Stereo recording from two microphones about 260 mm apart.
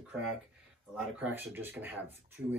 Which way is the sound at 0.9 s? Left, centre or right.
Centre.